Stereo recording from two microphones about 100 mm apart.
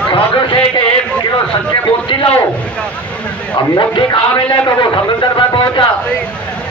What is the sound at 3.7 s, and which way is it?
A man's voice, 45° left (ahead or behind).